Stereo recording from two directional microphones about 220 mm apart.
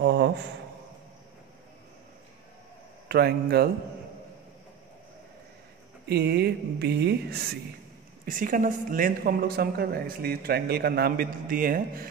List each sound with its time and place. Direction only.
0.0 s a sound: 50° right (ahead or behind)
3.1 s speech: 45° right (ahead or behind)
6.0 s speech: 45° right (ahead or behind)